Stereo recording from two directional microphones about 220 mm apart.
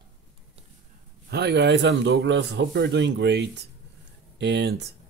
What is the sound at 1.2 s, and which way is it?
Speech, 50° right (ahead or behind).